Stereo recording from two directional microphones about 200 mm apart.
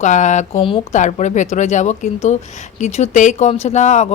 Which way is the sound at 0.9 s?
35° left (ahead or behind).